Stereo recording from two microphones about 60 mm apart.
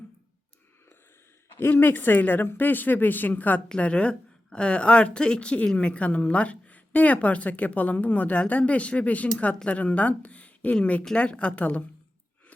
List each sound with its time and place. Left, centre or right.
1.7 s a woman's voice: left